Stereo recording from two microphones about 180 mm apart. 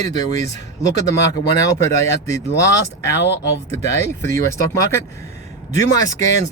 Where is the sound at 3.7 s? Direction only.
15° left (ahead or behind).